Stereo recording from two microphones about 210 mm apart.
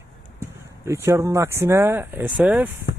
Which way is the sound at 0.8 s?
15° right (ahead or behind).